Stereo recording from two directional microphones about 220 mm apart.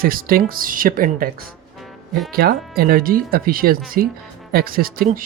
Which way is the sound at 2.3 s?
45° right (ahead or behind).